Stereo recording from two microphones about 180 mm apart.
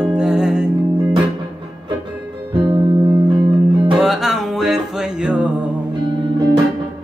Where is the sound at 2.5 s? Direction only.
30° right (ahead or behind).